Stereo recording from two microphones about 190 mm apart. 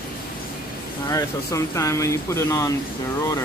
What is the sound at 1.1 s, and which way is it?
Speech, 15° left (ahead or behind).